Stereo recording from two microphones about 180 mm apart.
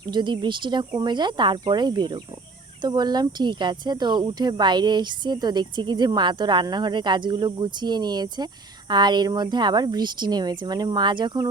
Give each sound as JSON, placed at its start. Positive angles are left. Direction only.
{"t": 0.1, "sound": "speech", "side_deg": -25}